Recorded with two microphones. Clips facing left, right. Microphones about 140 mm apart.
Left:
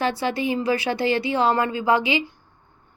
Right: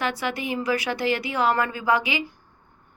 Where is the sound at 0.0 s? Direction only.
30° left (ahead or behind).